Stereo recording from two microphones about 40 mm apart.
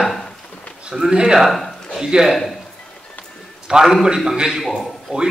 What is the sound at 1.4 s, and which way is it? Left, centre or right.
Speech, centre.